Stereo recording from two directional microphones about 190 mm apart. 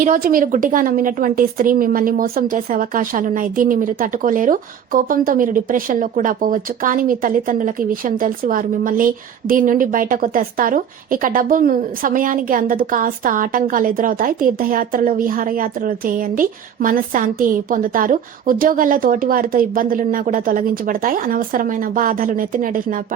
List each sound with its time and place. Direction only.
0.0 s a woman's voice: 45° right (ahead or behind)